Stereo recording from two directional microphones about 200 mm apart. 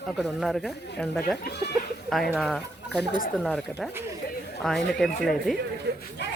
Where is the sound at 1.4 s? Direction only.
55° left (ahead or behind).